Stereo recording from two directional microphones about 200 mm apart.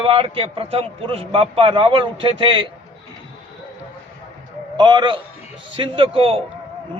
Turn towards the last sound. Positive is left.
turn(degrees=-30)  # may be behind; listen again after turning